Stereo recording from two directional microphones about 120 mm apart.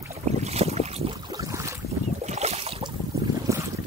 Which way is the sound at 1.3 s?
30° right (ahead or behind).